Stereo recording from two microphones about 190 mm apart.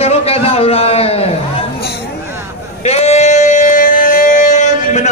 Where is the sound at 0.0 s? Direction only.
30° left (ahead or behind).